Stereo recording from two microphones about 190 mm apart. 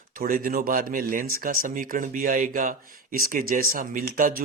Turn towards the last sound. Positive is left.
turn(degrees=-50)  # may be behind; listen again after turning